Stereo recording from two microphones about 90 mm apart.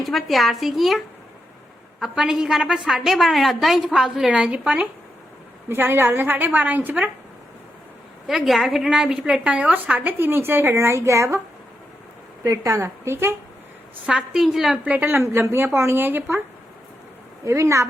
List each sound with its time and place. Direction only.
0.0 s a woman's voice: centre (ahead or behind); by 7.0 s 20° right (ahead or behind)
8.3 s a woman's voice: centre (ahead or behind); by 11.3 s 30° right (ahead or behind)
12.5 s a woman's voice: 35° right (ahead or behind)
14.1 s a woman's voice: 5° right (ahead or behind)
15.1 s a woman's voice: 30° right (ahead or behind)
17.4 s a woman's voice: 35° right (ahead or behind)